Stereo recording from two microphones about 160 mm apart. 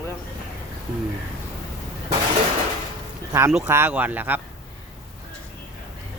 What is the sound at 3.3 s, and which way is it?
Speech, 15° right (ahead or behind).